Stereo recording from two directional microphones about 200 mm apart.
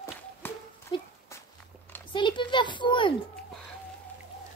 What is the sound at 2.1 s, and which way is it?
A child's voice, 25° left (ahead or behind).